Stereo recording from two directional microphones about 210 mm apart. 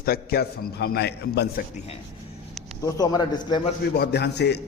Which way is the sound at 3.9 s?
50° left (ahead or behind).